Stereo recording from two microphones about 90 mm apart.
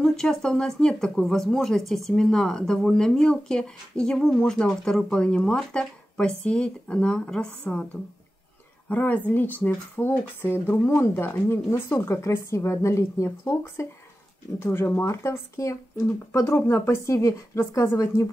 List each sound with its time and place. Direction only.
0.0 s speech: 5° left (ahead or behind)
8.8 s speech: 20° left (ahead or behind); by 18.2 s 35° left (ahead or behind)